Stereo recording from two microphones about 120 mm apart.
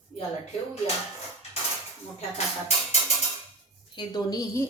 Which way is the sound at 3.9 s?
35° left (ahead or behind).